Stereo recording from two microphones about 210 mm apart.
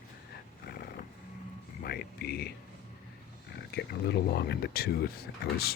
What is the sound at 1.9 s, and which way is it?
Speech, 50° left (ahead or behind).